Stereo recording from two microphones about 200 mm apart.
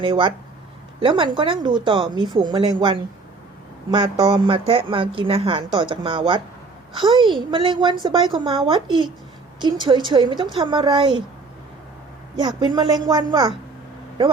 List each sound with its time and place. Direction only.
0.0 s a woman's voice: 25° right (ahead or behind)
12.4 s a woman's voice: 20° right (ahead or behind)